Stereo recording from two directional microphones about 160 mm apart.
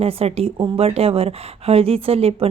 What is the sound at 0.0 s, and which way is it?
A woman's voice, 40° right (ahead or behind).